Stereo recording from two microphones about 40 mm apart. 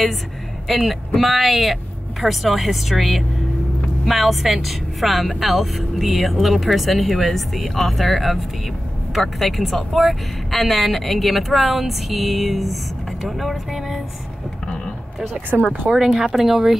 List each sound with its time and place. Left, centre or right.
0.7 s speech: centre
15.5 s speech: right
16.3 s speech: centre